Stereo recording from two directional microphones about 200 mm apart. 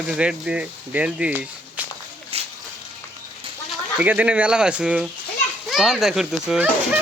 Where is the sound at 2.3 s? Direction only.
30° right (ahead or behind).